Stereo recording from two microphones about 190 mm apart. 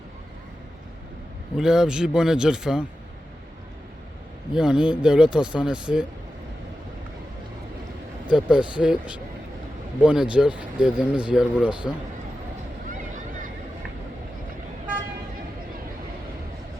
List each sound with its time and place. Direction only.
1.5 s speech: 5° right (ahead or behind)
4.5 s speech: 5° right (ahead or behind)
8.4 s speech: 5° right (ahead or behind)
12.9 s boat: 45° right (ahead or behind)